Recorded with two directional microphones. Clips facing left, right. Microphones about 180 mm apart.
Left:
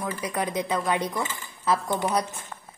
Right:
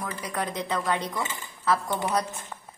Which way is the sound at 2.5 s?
10° right (ahead or behind).